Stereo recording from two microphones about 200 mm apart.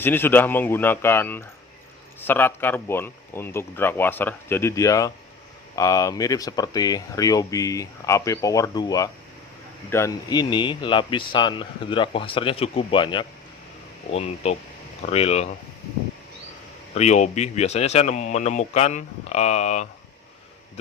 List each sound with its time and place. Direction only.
0.0 s speech: 10° left (ahead or behind); by 15.4 s 30° left (ahead or behind)
16.9 s speech: 35° left (ahead or behind)